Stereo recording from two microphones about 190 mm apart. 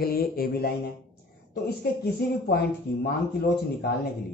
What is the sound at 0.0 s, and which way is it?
Mantra, 50° left (ahead or behind).